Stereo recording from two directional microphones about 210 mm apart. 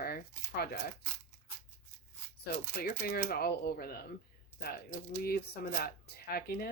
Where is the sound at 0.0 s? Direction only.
45° left (ahead or behind).